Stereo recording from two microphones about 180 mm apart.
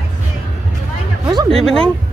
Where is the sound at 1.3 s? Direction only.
30° right (ahead or behind).